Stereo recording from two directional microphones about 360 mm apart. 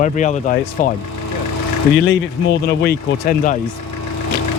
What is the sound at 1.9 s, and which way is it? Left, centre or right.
Speech, left.